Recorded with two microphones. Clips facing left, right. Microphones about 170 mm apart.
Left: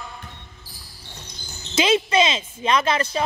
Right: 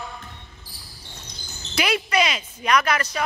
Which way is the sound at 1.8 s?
25° left (ahead or behind).